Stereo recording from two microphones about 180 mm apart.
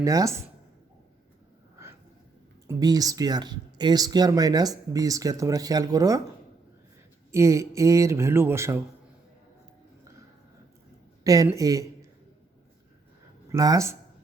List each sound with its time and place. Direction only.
0.0 s speech: 20° right (ahead or behind)
2.6 s speech: 20° right (ahead or behind)
7.3 s speech: 15° right (ahead or behind)
11.2 s speech: 20° right (ahead or behind)
13.5 s speech: 20° right (ahead or behind)